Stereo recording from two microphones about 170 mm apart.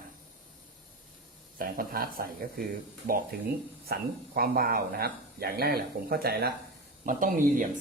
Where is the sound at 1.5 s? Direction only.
55° right (ahead or behind).